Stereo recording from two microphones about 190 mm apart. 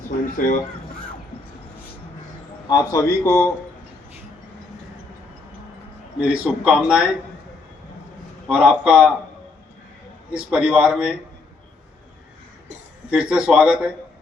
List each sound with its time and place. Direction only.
0.3 s speech: 45° left (ahead or behind)
2.6 s a man's voice: 20° left (ahead or behind)
6.1 s speech: 5° right (ahead or behind)
8.4 s speech: 5° right (ahead or behind)
10.3 s speech: 5° right (ahead or behind)
13.1 s speech: 5° right (ahead or behind)